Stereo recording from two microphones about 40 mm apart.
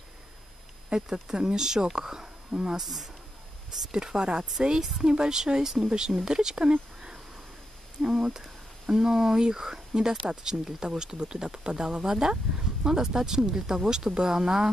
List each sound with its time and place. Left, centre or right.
0.8 s speech: centre
2.8 s speech: centre
3.7 s speech: centre
8.0 s speech: centre